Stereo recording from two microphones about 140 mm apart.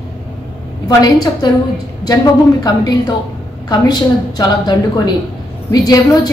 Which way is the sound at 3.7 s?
30° left (ahead or behind).